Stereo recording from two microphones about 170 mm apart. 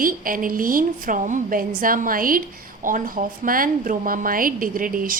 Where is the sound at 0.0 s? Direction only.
55° right (ahead or behind).